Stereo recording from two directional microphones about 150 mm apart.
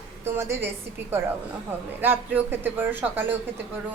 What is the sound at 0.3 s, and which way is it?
Speech, 20° right (ahead or behind).